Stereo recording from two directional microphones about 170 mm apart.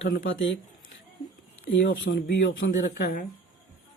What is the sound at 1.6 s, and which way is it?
Speech, 90° left.